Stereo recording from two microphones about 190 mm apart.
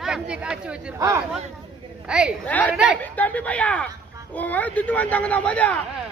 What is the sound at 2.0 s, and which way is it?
Speech, 5° right (ahead or behind).